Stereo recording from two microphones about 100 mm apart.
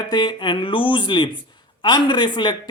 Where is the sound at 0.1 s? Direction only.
50° left (ahead or behind).